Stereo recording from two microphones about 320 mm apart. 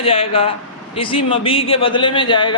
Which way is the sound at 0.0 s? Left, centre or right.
Centre.